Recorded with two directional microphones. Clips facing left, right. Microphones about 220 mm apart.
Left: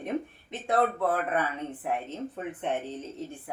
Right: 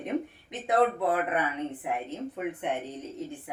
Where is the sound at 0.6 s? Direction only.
15° right (ahead or behind).